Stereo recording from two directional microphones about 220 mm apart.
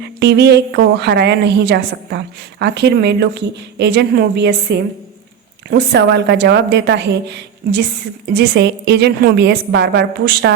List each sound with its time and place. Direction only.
0.0 s a woman's voice: 50° right (ahead or behind)